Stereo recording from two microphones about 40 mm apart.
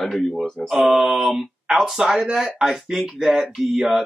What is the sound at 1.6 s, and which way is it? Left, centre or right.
Speech, right.